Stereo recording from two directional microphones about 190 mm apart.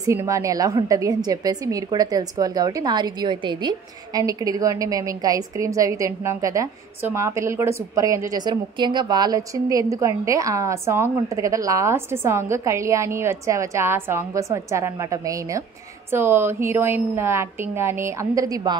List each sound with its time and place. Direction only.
0.0 s a woman's voice: 15° right (ahead or behind)